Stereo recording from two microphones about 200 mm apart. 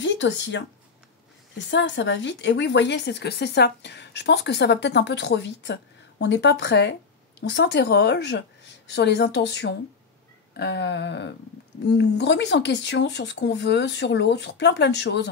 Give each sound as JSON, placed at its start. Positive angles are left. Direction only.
{"t": 0.0, "sound": "speech", "side_deg": 65}
{"t": 1.7, "sound": "a woman's voice", "side_deg": 65}